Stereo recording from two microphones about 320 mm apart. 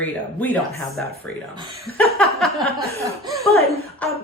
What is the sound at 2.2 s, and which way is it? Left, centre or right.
A woman's voice, centre.